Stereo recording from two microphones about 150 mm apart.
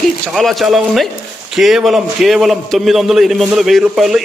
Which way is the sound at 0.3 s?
Centre (ahead or behind).